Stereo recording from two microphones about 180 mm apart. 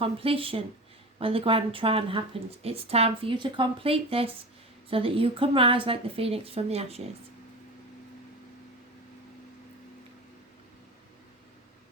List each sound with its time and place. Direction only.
0.0 s a woman's voice: 30° right (ahead or behind)